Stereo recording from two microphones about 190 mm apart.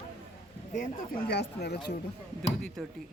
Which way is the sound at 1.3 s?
60° left (ahead or behind).